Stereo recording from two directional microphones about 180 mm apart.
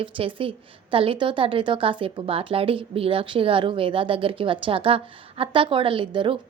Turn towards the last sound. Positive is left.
turn(degrees=-30)  # may be behind; listen again after turning